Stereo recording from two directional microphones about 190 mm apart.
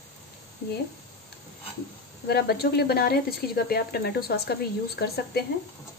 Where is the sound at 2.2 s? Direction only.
55° left (ahead or behind).